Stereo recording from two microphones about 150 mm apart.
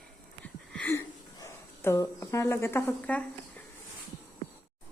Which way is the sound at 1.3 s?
15° left (ahead or behind).